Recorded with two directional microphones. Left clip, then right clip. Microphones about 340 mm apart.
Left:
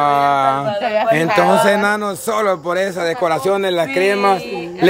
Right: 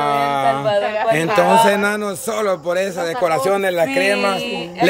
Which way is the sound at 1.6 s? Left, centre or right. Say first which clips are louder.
Left 2 dB; centre.